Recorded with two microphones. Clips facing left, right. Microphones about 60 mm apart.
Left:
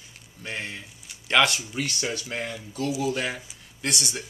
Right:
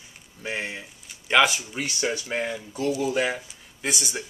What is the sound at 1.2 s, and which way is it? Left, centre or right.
Speech, centre.